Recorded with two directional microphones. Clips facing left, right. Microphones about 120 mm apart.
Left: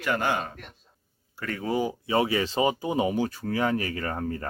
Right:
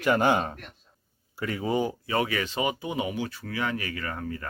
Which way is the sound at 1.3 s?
10° right (ahead or behind).